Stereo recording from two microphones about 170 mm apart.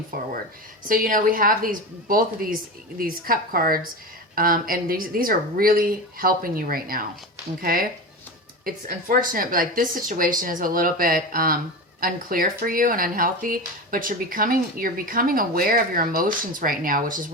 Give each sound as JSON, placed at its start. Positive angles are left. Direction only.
{"t": 0.1, "sound": "speech", "side_deg": -60}